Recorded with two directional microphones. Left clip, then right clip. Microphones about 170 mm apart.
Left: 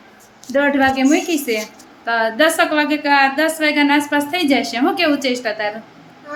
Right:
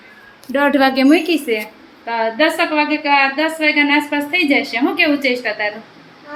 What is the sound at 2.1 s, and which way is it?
A woman's voice, 15° left (ahead or behind).